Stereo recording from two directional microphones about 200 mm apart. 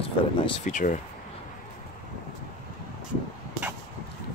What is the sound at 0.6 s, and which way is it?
Speech, 40° left (ahead or behind).